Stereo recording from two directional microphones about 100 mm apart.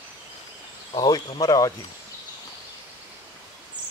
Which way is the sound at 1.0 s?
45° left (ahead or behind).